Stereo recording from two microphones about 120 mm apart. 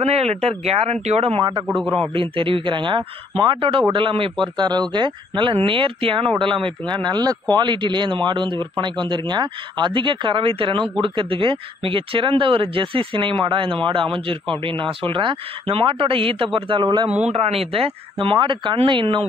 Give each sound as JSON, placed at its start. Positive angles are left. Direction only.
{"t": 0.0, "sound": "speech", "side_deg": -60}
{"t": 2.1, "sound": "speech", "side_deg": -45}
{"t": 17.3, "sound": "speech", "side_deg": -55}